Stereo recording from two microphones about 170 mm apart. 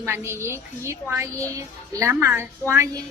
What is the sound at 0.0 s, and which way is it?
A woman's voice, 15° right (ahead or behind).